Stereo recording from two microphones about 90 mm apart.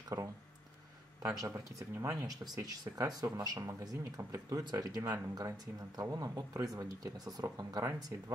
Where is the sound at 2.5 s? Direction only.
45° right (ahead or behind).